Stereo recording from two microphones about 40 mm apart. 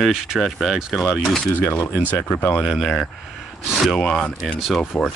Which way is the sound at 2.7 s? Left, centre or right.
Centre.